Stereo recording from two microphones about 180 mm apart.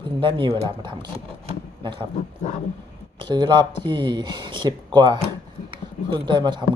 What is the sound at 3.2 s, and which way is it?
Speech, 25° right (ahead or behind).